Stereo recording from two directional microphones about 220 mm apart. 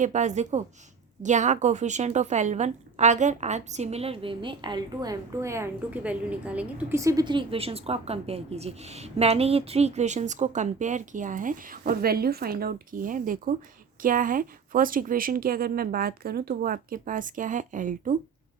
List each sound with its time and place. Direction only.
0.0 s a woman's voice: 35° right (ahead or behind)